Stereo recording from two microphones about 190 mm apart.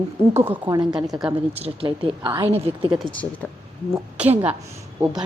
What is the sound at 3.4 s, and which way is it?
Speech, 5° left (ahead or behind).